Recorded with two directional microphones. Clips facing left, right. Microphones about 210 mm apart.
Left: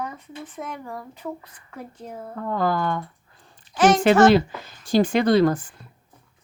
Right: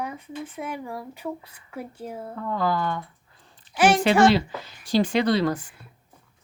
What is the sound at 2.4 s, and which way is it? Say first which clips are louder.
Speech: left 2 dB; 50° left (ahead or behind).